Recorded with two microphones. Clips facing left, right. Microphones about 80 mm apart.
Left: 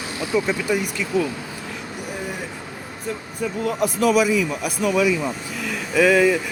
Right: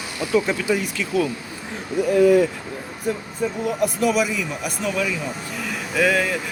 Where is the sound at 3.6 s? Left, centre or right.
Centre.